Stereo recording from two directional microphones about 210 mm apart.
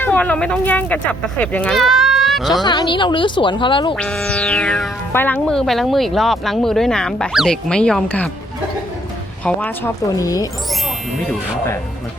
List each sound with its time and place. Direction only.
0.0 s speech: 10° left (ahead or behind)
2.6 s speech: 20° left (ahead or behind)
3.9 s speech: 5° left (ahead or behind)
9.4 s a woman's voice: 5° left (ahead or behind)